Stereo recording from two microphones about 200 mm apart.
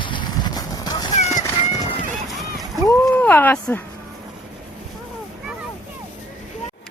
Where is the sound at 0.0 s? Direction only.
25° left (ahead or behind).